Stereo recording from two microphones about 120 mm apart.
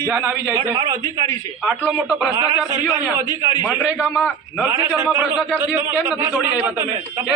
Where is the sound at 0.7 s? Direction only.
35° right (ahead or behind).